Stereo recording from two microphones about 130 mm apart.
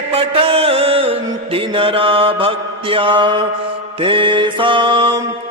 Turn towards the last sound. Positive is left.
turn(degrees=-35)  # may be behind; listen again after turning